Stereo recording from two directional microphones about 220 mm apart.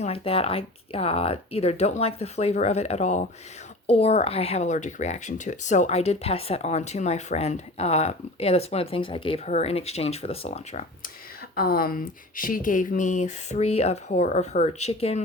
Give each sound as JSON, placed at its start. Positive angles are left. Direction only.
{"t": 0.0, "sound": "speech", "side_deg": 25}
{"t": 11.5, "sound": "speech", "side_deg": 45}